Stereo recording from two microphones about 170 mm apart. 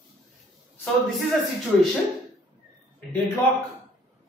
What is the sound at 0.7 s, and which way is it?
Speech, 5° left (ahead or behind).